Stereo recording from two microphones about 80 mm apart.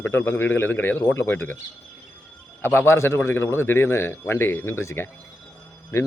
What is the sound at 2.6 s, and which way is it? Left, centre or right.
A man's voice, left.